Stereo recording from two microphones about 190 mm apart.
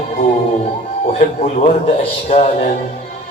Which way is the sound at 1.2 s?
35° left (ahead or behind).